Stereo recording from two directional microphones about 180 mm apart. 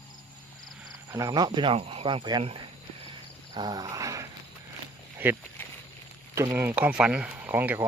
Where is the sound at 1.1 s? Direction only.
20° right (ahead or behind).